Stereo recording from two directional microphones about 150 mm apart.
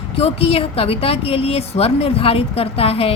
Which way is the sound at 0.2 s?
40° left (ahead or behind).